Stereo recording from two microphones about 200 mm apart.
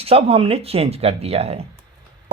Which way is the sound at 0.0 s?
30° right (ahead or behind).